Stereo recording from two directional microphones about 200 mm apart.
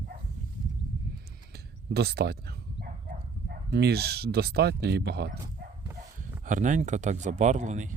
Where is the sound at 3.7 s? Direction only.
55° right (ahead or behind).